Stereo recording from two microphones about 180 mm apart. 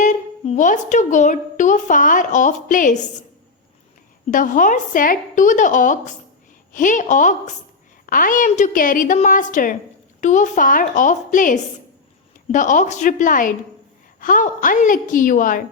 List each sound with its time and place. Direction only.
0.0 s a woman's voice: 45° left (ahead or behind)
4.3 s a woman's voice: 50° left (ahead or behind)